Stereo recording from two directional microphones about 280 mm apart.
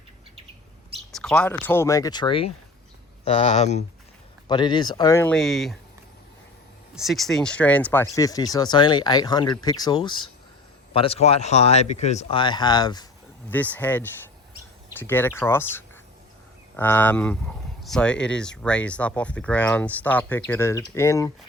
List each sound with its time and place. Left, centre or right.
1.1 s speech: centre
6.9 s speech: centre